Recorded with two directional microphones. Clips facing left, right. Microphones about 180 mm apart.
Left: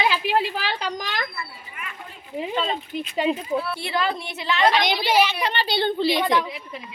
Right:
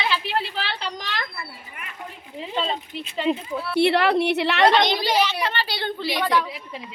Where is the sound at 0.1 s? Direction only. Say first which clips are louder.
Left 2 dB; 10° left (ahead or behind).